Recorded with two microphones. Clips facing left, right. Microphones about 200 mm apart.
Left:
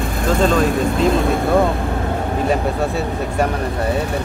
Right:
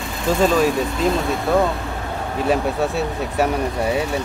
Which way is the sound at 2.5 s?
Centre (ahead or behind).